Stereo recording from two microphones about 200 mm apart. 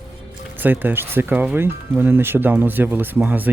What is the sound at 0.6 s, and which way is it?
Speech, 10° right (ahead or behind).